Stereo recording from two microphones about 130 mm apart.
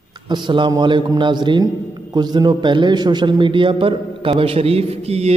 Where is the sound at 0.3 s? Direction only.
35° right (ahead or behind).